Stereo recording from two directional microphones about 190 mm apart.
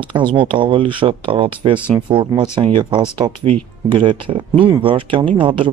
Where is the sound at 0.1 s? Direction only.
25° right (ahead or behind).